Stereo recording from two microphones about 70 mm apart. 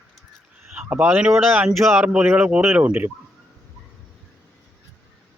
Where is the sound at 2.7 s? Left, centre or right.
Centre.